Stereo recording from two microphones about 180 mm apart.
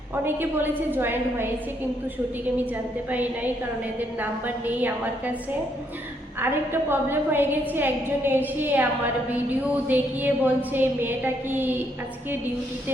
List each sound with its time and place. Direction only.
0.3 s a woman's voice: 10° right (ahead or behind)
3.1 s a woman's voice: 10° right (ahead or behind)
6.4 s a woman's voice: 10° right (ahead or behind)